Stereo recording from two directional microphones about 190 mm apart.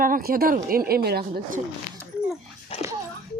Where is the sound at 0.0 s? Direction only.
50° right (ahead or behind).